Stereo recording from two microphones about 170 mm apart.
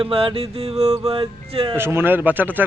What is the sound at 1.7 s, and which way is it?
Speech, 15° right (ahead or behind).